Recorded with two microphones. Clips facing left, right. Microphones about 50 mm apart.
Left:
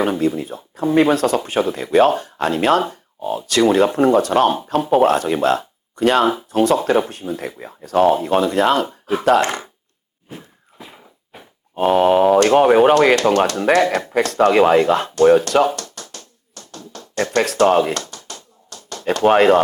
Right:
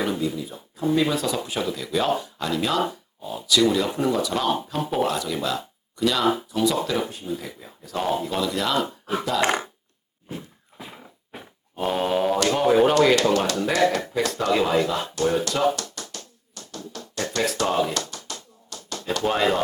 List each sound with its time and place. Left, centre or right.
0.0 s speech: left
4.8 s speech: centre
5.0 s speech: left
9.2 s speech: left
10.8 s a sound: centre
11.7 s speech: left
12.4 s speech: left
14.1 s a sound: left
17.3 s speech: left
18.1 s tap: left
19.1 s speech: left